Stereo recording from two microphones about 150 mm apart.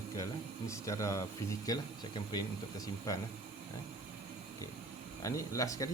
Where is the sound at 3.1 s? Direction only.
20° left (ahead or behind).